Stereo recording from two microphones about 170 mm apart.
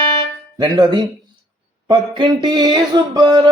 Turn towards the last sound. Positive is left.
turn(degrees=-25)  # may be behind; listen again after turning